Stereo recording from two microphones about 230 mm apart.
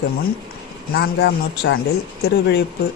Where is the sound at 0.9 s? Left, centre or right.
Left.